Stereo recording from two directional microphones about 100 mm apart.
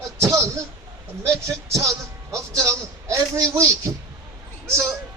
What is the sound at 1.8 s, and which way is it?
A man's voice, 35° right (ahead or behind).